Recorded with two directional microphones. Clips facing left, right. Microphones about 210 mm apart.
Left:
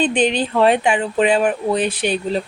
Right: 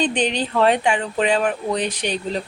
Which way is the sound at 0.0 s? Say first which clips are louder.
Left 4 dB; 15° left (ahead or behind).